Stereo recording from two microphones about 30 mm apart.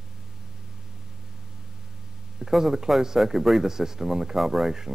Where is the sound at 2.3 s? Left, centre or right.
Centre.